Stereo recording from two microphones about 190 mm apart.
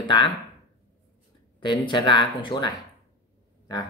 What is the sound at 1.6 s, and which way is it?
Speech, 25° left (ahead or behind).